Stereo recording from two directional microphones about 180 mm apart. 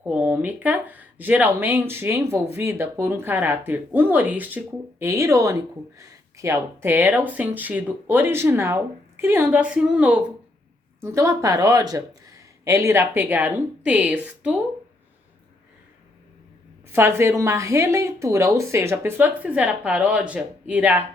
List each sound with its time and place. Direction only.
0.0 s speech: 10° right (ahead or behind)
16.9 s speech: 15° right (ahead or behind)